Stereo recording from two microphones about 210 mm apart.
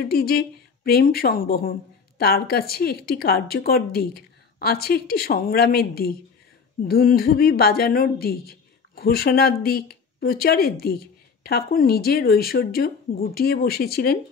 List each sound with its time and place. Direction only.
0.0 s speech: 45° left (ahead or behind)